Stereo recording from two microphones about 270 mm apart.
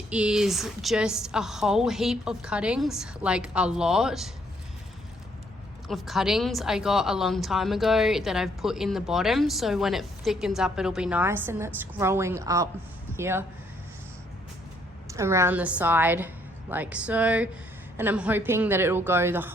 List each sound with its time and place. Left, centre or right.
0.1 s a woman's voice: centre
5.9 s a woman's voice: centre
15.0 s a woman's voice: centre